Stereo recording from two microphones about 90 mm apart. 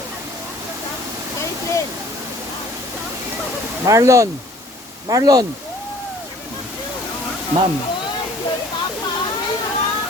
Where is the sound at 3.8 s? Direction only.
35° right (ahead or behind).